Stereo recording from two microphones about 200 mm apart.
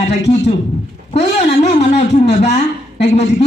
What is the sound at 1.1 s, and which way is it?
A man's voice, 35° left (ahead or behind).